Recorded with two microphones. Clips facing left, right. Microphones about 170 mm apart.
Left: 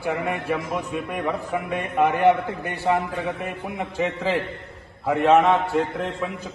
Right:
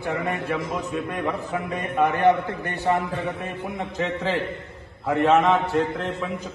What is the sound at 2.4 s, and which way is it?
A man's voice, centre (ahead or behind).